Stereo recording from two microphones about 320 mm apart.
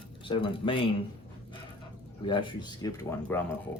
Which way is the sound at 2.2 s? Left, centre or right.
Centre.